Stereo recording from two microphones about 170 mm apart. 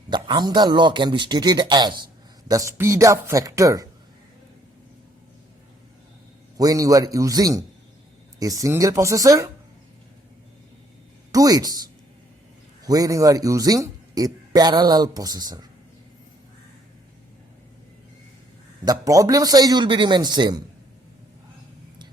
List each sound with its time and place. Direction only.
0.1 s speech: 25° right (ahead or behind)
6.6 s speech: 20° right (ahead or behind)
11.3 s speech: 20° right (ahead or behind)
12.8 s speech: 20° right (ahead or behind)
18.9 s speech: 20° right (ahead or behind)